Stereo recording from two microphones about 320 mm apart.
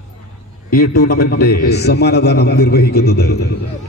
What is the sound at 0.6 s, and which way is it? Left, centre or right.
A man's voice, left.